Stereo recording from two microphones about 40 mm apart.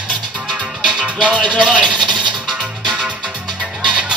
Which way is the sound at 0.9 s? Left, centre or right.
Right.